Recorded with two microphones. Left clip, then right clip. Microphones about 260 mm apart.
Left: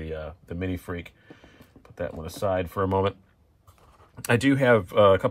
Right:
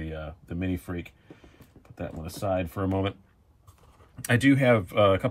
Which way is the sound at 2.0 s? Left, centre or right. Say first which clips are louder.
Left 5 dB; centre.